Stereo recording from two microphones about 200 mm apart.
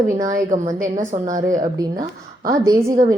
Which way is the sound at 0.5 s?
40° right (ahead or behind).